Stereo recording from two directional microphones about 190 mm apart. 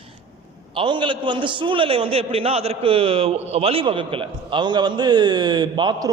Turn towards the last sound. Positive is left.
turn(degrees=-25)  # may be behind; listen again after turning